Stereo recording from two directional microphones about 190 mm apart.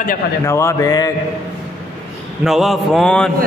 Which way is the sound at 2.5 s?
Centre (ahead or behind).